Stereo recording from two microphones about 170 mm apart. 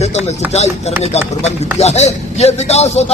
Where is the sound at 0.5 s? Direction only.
40° left (ahead or behind).